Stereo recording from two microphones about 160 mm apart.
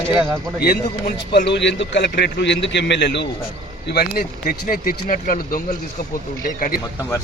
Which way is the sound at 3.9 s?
70° left (ahead or behind).